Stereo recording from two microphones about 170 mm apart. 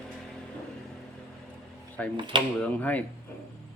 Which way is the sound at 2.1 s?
25° right (ahead or behind).